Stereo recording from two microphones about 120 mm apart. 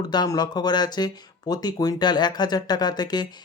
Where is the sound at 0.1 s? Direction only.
35° left (ahead or behind).